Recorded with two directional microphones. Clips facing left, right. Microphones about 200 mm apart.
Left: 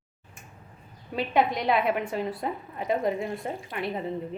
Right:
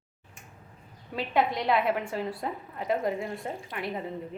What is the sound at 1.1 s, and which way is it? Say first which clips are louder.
A woman's voice: left 2 dB; 15° left (ahead or behind).